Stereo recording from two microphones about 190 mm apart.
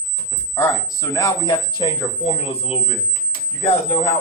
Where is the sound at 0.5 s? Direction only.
15° left (ahead or behind).